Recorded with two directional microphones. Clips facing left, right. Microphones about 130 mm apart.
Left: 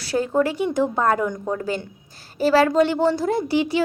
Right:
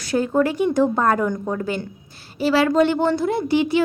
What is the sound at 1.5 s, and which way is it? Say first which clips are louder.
Speech: right 1 dB; 35° left (ahead or behind).